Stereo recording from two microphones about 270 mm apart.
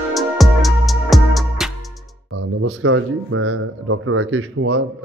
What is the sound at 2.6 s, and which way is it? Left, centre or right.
Speech, right.